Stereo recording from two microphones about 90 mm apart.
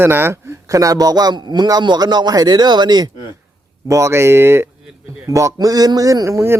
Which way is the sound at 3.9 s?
30° right (ahead or behind).